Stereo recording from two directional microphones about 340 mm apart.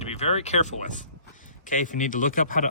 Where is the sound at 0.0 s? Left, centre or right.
Centre.